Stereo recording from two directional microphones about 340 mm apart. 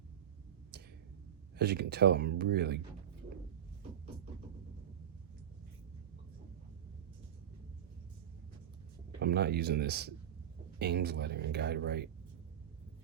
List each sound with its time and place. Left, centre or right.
1.5 s speech: right
9.2 s speech: right